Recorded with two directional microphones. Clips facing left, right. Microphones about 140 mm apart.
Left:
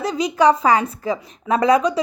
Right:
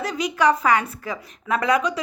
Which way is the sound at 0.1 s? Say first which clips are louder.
Left 4 dB; 30° left (ahead or behind).